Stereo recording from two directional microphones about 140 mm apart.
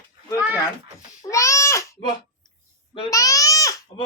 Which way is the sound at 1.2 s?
20° left (ahead or behind).